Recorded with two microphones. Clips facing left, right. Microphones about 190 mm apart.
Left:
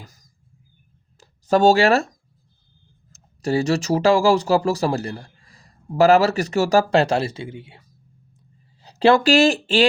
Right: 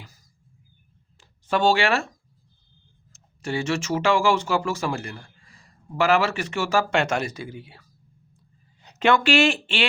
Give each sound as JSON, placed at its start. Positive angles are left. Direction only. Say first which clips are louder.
{"t": 1.2, "sound": "speech", "louder": "left 6 dB", "side_deg": 40}